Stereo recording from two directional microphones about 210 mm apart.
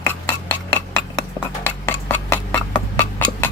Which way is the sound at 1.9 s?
10° left (ahead or behind).